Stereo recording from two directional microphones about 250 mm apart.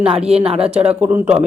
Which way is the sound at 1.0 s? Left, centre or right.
Centre.